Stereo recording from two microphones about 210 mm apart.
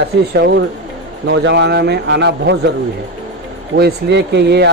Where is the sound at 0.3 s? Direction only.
55° right (ahead or behind).